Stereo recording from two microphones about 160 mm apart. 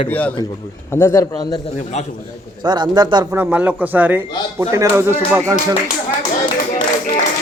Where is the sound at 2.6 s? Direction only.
25° right (ahead or behind).